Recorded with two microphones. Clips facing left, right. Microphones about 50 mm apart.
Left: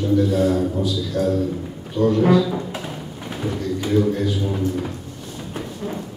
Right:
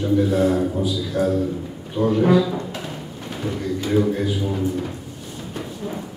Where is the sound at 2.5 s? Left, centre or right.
Centre.